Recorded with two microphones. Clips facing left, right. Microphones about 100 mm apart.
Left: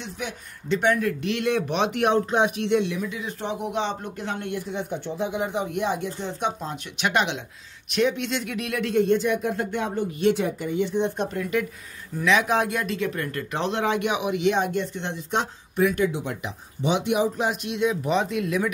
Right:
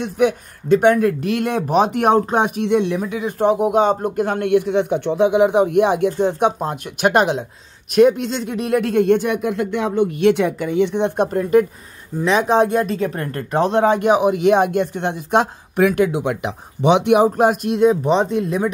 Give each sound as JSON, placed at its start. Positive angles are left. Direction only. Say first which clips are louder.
{"t": 0.0, "sound": "speech", "louder": "right 16 dB", "side_deg": -55}
{"t": 8.9, "sound": "speech", "louder": "right 2 dB", "side_deg": -55}
{"t": 12.2, "sound": "speech", "louder": "right 6 dB", "side_deg": -35}